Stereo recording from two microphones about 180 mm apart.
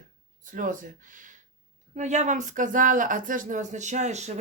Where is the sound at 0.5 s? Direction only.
45° right (ahead or behind).